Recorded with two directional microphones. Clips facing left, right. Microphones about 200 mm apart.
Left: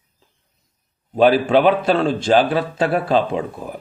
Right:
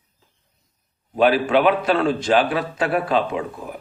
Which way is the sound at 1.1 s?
35° left (ahead or behind).